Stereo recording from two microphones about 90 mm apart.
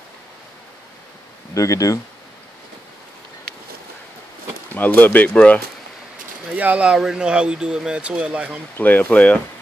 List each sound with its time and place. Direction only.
1.5 s speech: 35° left (ahead or behind)
4.7 s speech: 20° left (ahead or behind)
6.5 s speech: 15° right (ahead or behind)
8.7 s speech: 20° left (ahead or behind)